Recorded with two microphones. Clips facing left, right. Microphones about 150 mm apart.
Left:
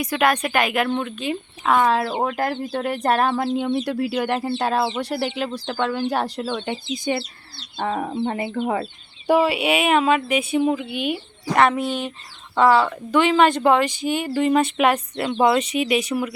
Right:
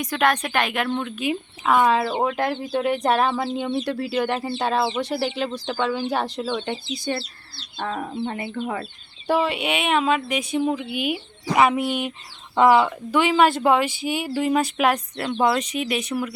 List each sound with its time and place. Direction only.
0.0 s speech: 10° left (ahead or behind)
6.1 s speech: 10° left (ahead or behind)
7.0 s speech: 15° left (ahead or behind)
7.9 s speech: 30° left (ahead or behind)
9.2 s speech: 10° left (ahead or behind)